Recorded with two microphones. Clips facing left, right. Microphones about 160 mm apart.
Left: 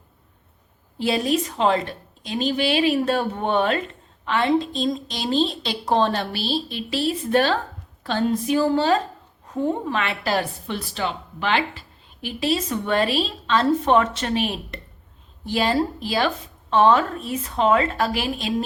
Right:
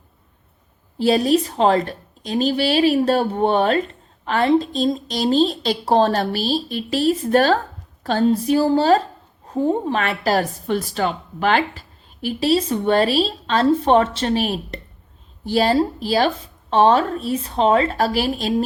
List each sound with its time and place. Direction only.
0.9 s a woman's voice: 35° right (ahead or behind)